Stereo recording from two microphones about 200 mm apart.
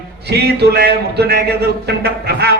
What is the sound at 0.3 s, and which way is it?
A man's voice, 55° right (ahead or behind).